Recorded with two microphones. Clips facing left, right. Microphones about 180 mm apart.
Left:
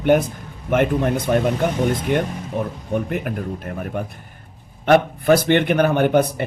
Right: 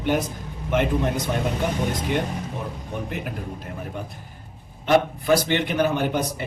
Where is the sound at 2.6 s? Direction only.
55° left (ahead or behind).